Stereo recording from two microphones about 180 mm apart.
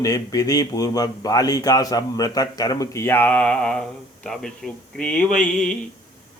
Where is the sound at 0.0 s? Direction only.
20° left (ahead or behind).